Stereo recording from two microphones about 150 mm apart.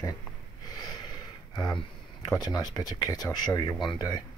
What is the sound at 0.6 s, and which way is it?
Snort, 25° left (ahead or behind).